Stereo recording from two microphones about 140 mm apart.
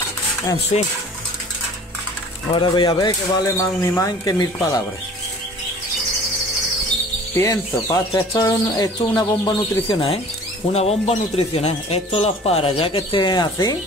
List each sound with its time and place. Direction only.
0.7 s speech: 45° left (ahead or behind)
2.5 s speech: 35° left (ahead or behind)
7.3 s speech: 20° left (ahead or behind)
9.9 s speech: 45° left (ahead or behind); by 13.7 s 30° left (ahead or behind)